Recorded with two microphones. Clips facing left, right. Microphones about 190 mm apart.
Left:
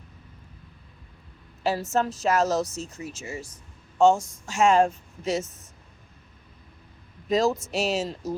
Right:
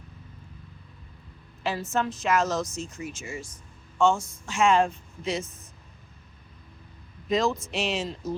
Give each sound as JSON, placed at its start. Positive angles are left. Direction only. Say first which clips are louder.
{"t": 1.6, "sound": "a woman's voice", "louder": "left 3 dB", "side_deg": 40}
{"t": 7.3, "sound": "a woman's voice", "louder": "left 2 dB", "side_deg": 40}